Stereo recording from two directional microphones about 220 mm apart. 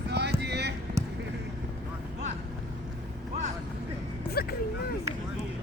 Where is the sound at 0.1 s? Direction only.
50° right (ahead or behind).